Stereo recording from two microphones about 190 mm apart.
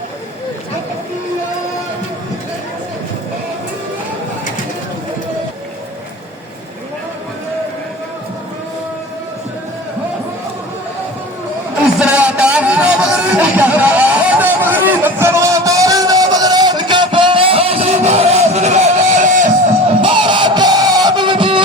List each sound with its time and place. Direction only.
11.9 s music: 5° right (ahead or behind); by 19.5 s 40° right (ahead or behind)
20.0 s music: 25° right (ahead or behind)